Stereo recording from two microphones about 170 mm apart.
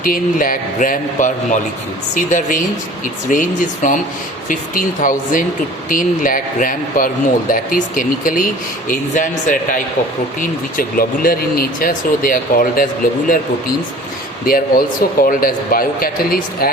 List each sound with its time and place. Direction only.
0.0 s speech: 55° left (ahead or behind)
14.4 s speech: 60° left (ahead or behind)